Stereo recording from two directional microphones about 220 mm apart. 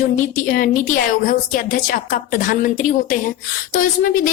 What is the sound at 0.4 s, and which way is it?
A woman's voice, 40° left (ahead or behind).